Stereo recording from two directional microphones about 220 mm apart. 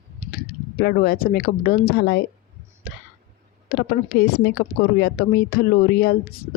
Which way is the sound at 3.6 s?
45° left (ahead or behind).